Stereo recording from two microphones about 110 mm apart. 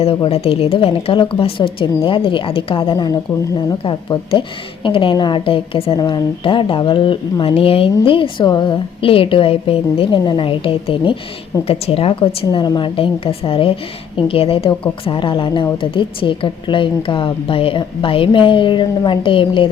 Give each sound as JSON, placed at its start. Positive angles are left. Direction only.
{"t": 0.0, "sound": "a woman's voice", "side_deg": 60}
{"t": 3.8, "sound": "a woman's voice", "side_deg": 50}
{"t": 6.0, "sound": "a woman's voice", "side_deg": 40}
{"t": 12.5, "sound": "a woman's voice", "side_deg": 40}